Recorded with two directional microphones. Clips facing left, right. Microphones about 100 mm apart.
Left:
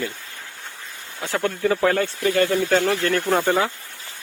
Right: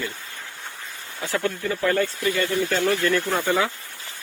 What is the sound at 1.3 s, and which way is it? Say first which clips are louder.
Speech: left 4 dB; 70° left (ahead or behind).